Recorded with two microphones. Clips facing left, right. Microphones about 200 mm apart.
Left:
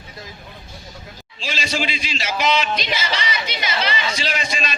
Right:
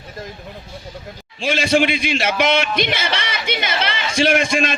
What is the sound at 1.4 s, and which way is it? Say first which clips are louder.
A man's voice: right 9 dB; 55° right (ahead or behind).